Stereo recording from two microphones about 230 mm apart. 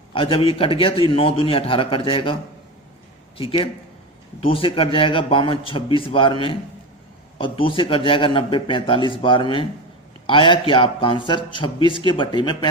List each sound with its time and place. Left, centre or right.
0.1 s a man's voice: left
3.3 s a man's voice: left